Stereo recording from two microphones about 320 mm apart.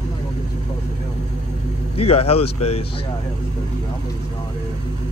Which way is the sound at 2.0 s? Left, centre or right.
Centre.